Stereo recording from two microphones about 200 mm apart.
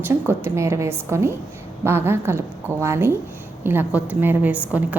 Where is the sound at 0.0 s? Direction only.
10° right (ahead or behind).